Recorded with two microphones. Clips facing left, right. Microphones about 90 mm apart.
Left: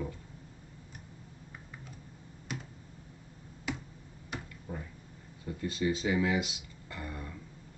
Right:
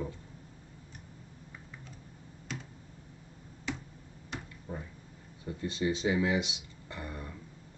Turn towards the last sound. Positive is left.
turn(degrees=-20)  # may be behind; listen again after turning